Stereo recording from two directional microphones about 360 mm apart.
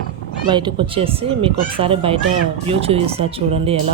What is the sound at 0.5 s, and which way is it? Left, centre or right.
Speech, centre.